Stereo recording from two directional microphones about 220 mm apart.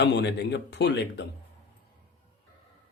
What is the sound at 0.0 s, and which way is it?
Speech, 50° left (ahead or behind).